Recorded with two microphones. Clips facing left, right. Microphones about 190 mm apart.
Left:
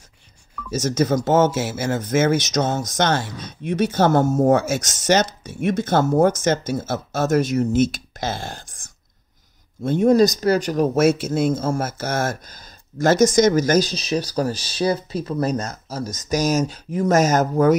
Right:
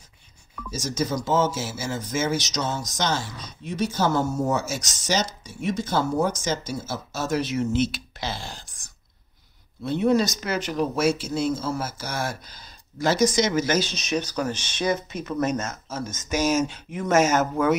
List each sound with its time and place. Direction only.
0.7 s speech: 60° left (ahead or behind); by 17.7 s 40° left (ahead or behind)